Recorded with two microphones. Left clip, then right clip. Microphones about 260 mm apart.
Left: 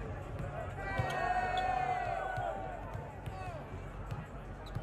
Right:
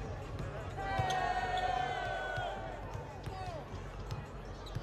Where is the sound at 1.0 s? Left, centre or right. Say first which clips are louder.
Left 1 dB; right.